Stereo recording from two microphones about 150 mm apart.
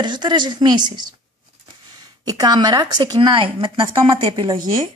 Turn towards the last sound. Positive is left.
turn(degrees=-30)  # may be behind; listen again after turning